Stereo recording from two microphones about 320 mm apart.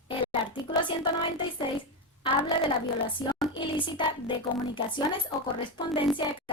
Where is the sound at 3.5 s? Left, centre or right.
Centre.